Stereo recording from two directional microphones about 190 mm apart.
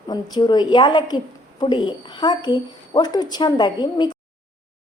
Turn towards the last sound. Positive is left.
turn(degrees=25)  # may be behind; listen again after turning